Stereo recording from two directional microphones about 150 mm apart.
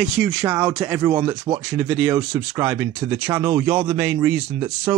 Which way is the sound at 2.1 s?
20° right (ahead or behind).